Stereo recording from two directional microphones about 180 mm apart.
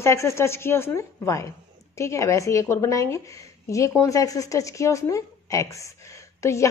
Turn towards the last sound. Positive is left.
turn(degrees=15)  # may be behind; listen again after turning